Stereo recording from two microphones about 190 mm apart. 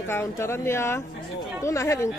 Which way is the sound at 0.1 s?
15° left (ahead or behind).